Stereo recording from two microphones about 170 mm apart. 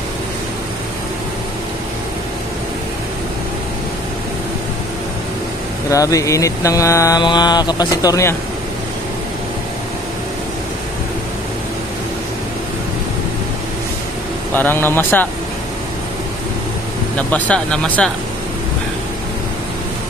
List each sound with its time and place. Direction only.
5.9 s speech: 20° left (ahead or behind)
14.5 s speech: 10° left (ahead or behind)
17.3 s speech: 10° left (ahead or behind)